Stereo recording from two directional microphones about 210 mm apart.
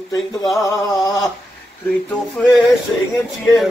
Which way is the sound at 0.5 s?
15° left (ahead or behind).